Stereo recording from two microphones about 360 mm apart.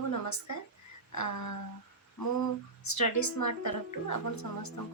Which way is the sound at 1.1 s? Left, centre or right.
Left.